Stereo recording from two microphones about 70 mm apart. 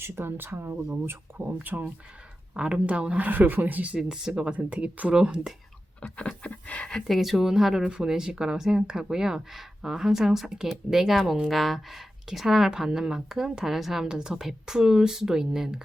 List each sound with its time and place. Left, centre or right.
0.0 s speech: right
1.4 s speech: right
6.0 s a sound: centre
7.1 s speech: centre